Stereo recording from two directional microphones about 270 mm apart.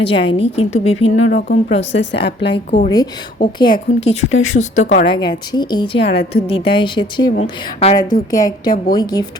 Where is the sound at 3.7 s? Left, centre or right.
Left.